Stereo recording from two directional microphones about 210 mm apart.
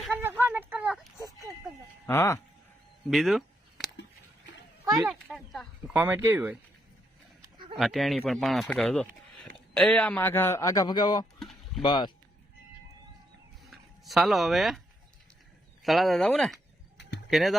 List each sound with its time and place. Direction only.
0.0 s a sound: 10° right (ahead or behind)
2.0 s speech: 15° left (ahead or behind)
3.1 s speech: centre (ahead or behind)
4.9 s speech: centre (ahead or behind)
7.8 s speech: centre (ahead or behind); by 11.3 s 20° left (ahead or behind)
11.3 s a sound: centre (ahead or behind)
11.8 s speech: 20° left (ahead or behind)
13.7 s speech: centre (ahead or behind)
15.8 s speech: centre (ahead or behind)